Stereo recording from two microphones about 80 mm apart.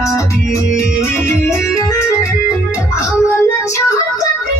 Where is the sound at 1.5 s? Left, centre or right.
Left.